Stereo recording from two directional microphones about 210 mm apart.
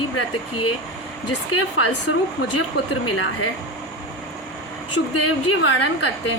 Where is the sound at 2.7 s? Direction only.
50° left (ahead or behind).